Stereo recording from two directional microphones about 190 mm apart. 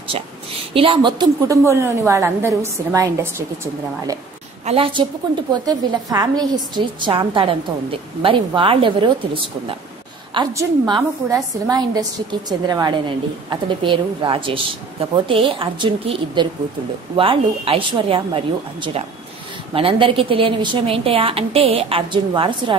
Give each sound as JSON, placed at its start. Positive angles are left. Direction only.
{"t": 0.7, "sound": "a woman's voice", "side_deg": -25}
{"t": 4.6, "sound": "a woman's voice", "side_deg": -30}